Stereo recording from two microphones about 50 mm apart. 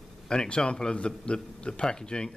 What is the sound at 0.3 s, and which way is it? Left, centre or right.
A man's voice, centre.